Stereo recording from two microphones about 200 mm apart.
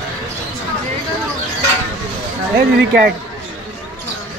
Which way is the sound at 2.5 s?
55° right (ahead or behind).